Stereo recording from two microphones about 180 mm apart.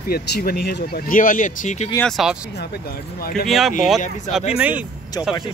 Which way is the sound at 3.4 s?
Centre (ahead or behind).